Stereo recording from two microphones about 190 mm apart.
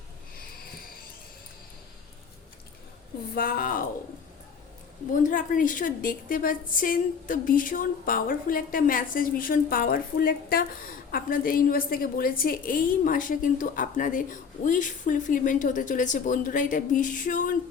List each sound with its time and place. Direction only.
3.3 s a woman's voice: 50° left (ahead or behind)
5.1 s a woman's voice: 45° left (ahead or behind)